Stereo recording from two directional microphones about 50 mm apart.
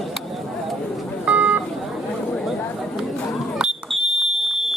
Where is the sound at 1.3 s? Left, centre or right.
Right.